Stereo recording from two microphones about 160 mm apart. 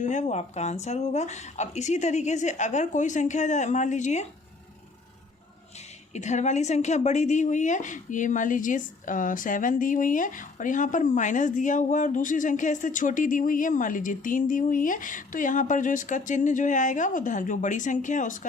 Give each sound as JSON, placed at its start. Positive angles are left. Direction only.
{"t": 0.0, "sound": "a woman's voice", "side_deg": 45}
{"t": 6.1, "sound": "a woman's voice", "side_deg": 45}